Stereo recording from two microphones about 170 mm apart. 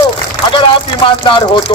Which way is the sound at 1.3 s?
30° left (ahead or behind).